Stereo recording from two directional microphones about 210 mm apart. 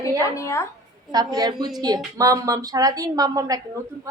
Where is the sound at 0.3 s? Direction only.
15° left (ahead or behind).